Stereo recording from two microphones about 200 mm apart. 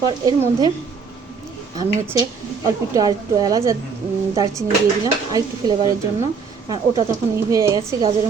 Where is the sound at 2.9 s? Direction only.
20° right (ahead or behind).